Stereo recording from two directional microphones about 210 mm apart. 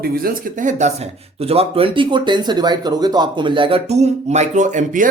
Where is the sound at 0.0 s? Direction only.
45° right (ahead or behind).